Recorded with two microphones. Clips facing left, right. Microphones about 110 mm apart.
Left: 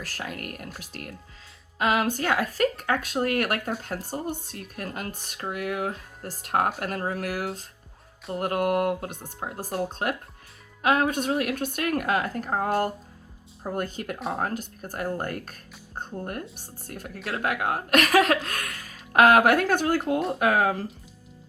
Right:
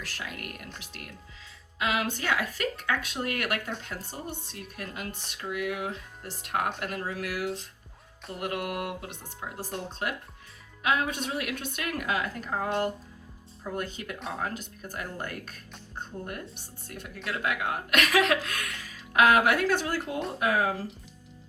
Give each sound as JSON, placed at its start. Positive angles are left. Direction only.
{"t": 0.0, "sound": "speech", "side_deg": 45}